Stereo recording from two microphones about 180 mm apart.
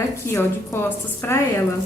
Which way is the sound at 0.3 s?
15° left (ahead or behind).